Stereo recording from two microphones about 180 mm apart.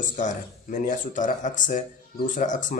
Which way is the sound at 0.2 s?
45° left (ahead or behind).